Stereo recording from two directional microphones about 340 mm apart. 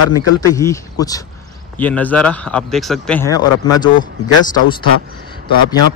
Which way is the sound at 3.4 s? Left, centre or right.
Left.